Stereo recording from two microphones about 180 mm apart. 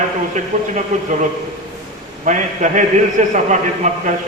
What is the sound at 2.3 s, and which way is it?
A man's voice, 45° right (ahead or behind).